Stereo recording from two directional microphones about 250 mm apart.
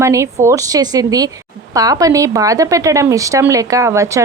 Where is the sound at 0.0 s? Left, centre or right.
Centre.